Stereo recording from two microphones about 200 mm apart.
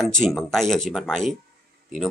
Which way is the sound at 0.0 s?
Centre (ahead or behind).